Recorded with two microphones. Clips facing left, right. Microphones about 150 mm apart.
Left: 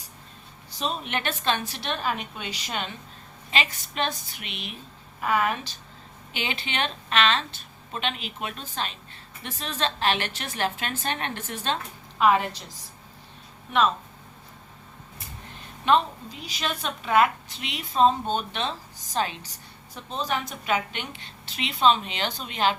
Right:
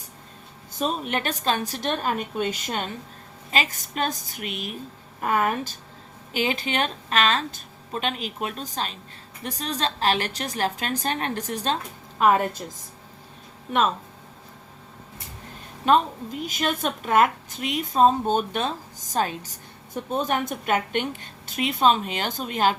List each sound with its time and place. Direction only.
0.8 s a woman's voice: 45° right (ahead or behind)
15.9 s a woman's voice: 50° right (ahead or behind)